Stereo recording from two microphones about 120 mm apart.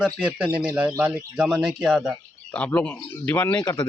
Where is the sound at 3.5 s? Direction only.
35° left (ahead or behind).